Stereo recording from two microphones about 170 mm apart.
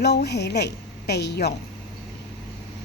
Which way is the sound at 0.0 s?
80° left.